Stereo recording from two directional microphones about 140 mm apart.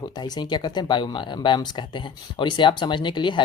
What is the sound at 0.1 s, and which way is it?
Speech, 30° left (ahead or behind).